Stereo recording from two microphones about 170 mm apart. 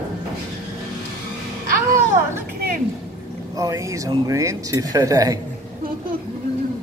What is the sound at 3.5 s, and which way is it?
Speech, 20° right (ahead or behind).